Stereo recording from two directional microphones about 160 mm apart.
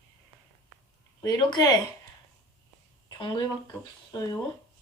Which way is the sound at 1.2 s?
25° left (ahead or behind).